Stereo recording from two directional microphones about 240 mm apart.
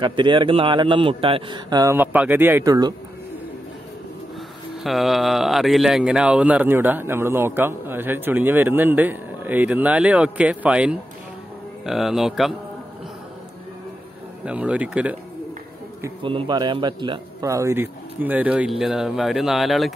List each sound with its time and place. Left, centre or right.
0.0 s a man's voice: centre
4.8 s speech: centre
14.4 s speech: centre
16.0 s speech: right; by 19.9 s centre